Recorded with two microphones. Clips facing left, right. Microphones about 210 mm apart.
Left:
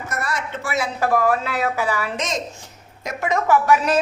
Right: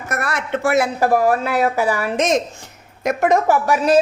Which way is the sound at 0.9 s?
35° right (ahead or behind).